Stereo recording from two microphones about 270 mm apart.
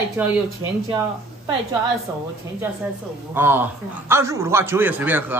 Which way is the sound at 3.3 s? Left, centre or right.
Centre.